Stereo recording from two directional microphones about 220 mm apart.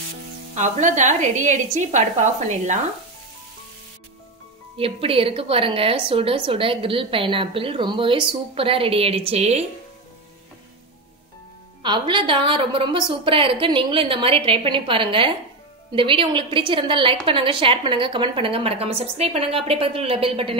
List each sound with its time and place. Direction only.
0.6 s a woman's voice: 35° right (ahead or behind)
4.7 s a woman's voice: 25° right (ahead or behind)
11.8 s a woman's voice: 20° right (ahead or behind)